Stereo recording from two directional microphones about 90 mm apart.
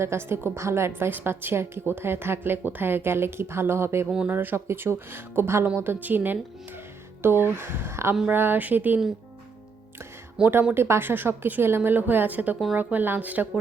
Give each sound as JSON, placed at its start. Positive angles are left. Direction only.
{"t": 0.0, "sound": "a woman's voice", "side_deg": -30}
{"t": 10.4, "sound": "a woman's voice", "side_deg": -20}